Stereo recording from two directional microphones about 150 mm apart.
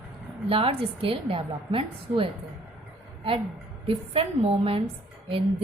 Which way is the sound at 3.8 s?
40° right (ahead or behind).